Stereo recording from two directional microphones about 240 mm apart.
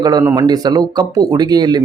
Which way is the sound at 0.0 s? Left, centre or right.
Centre.